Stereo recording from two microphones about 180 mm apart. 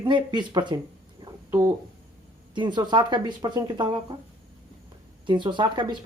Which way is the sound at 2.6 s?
25° right (ahead or behind).